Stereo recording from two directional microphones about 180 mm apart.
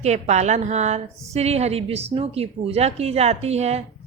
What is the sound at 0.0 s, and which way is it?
Speech, 40° right (ahead or behind).